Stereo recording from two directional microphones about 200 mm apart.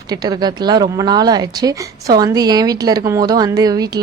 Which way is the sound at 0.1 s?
20° right (ahead or behind).